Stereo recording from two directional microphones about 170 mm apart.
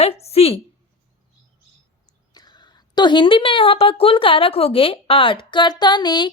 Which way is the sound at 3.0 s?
25° left (ahead or behind).